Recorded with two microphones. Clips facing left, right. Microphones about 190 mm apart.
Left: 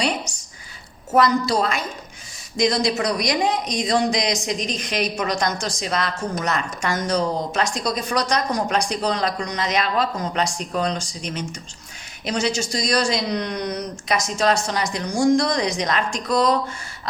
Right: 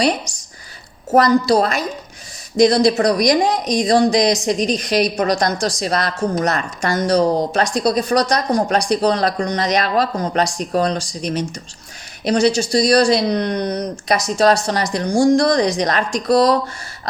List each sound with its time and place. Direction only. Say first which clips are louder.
1.1 s speech: right 5 dB; 35° right (ahead or behind)